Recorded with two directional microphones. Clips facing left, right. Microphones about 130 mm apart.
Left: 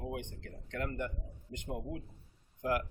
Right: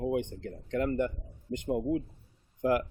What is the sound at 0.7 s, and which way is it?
Speech, 15° right (ahead or behind).